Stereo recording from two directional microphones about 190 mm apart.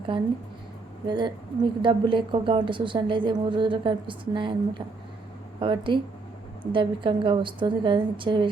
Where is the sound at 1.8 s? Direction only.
25° right (ahead or behind).